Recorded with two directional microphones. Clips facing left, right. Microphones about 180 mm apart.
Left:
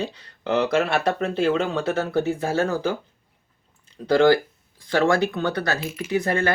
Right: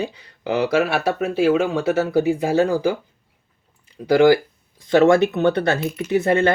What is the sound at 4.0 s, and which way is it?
Speech, 10° right (ahead or behind).